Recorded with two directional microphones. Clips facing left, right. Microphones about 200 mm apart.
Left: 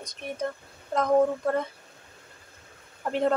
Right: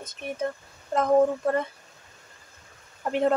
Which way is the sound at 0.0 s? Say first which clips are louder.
Right 2 dB; 5° right (ahead or behind).